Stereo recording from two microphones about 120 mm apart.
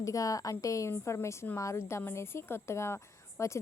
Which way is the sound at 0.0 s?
30° left (ahead or behind).